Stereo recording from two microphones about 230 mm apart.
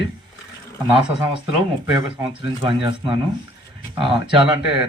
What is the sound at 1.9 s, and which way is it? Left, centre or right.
Speech, centre.